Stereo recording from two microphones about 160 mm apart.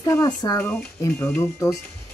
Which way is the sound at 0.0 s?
20° left (ahead or behind).